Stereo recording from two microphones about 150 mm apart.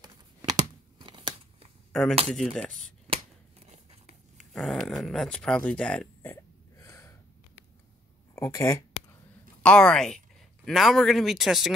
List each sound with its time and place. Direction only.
0.0 s tearing: 25° right (ahead or behind)
1.9 s speech: 5° left (ahead or behind)
3.1 s a sound: 45° right (ahead or behind)
4.4 s speech: centre (ahead or behind)
6.8 s gasp: 20° left (ahead or behind)
8.4 s speech: 20° left (ahead or behind)
9.6 s speech: 5° left (ahead or behind)